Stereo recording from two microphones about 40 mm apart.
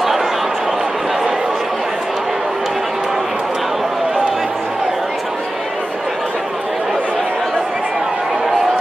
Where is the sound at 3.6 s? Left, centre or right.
Centre.